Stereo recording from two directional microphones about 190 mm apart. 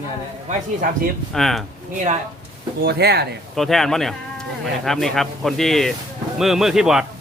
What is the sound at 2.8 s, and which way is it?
Speech, 55° right (ahead or behind).